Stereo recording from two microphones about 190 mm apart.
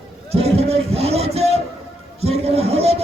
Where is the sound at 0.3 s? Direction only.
30° right (ahead or behind).